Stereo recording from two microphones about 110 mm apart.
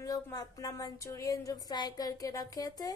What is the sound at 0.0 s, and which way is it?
Speech, 35° left (ahead or behind).